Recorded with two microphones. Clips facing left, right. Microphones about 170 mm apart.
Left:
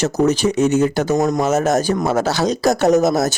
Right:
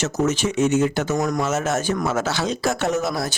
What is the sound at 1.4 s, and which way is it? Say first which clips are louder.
Speech: left 6 dB; 40° left (ahead or behind).